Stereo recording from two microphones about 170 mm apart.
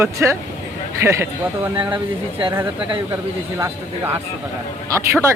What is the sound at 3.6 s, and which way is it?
Speech, 15° right (ahead or behind).